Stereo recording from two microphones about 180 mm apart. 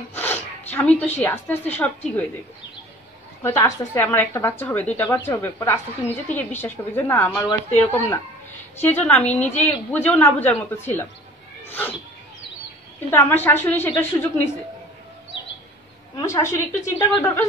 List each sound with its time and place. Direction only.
0.1 s speech: 10° left (ahead or behind)
3.4 s speech: 15° left (ahead or behind)
13.1 s speech: 10° left (ahead or behind)
16.2 s speech: 20° left (ahead or behind)